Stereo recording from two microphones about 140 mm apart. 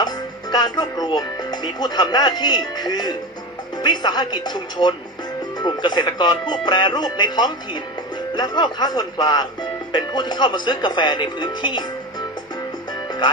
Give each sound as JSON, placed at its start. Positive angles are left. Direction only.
{"t": 0.5, "sound": "speech", "side_deg": 30}
{"t": 12.9, "sound": "music", "side_deg": 35}